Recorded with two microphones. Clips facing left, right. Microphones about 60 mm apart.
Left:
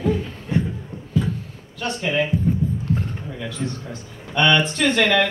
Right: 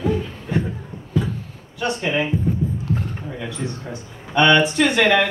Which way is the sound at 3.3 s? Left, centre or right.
Centre.